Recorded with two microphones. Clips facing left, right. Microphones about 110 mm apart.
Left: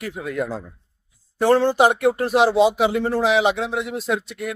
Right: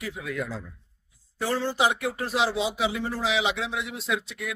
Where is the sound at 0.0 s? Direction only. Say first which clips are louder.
Left 6 dB; 50° left (ahead or behind).